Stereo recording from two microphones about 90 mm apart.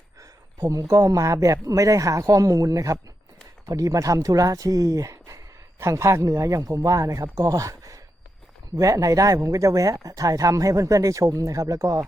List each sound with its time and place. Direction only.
0.2 s speech: 40° right (ahead or behind)